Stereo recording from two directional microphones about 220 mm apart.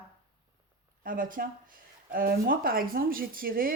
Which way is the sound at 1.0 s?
40° right (ahead or behind).